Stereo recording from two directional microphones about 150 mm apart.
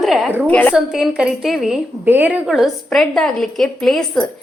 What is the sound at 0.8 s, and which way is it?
A woman's voice, 5° right (ahead or behind).